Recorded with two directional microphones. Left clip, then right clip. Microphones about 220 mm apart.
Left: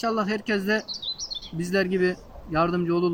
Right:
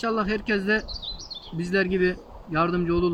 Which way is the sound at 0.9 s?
25° left (ahead or behind).